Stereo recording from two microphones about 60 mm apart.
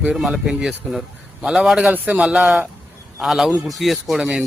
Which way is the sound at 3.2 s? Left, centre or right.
Centre.